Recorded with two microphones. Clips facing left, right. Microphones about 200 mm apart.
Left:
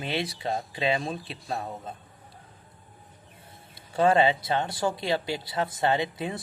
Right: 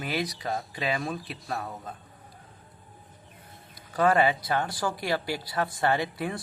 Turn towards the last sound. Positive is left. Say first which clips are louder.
# left 1 dB
turn(degrees=20)  # may be behind; listen again after turning